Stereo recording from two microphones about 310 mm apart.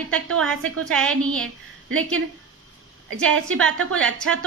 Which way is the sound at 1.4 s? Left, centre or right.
Right.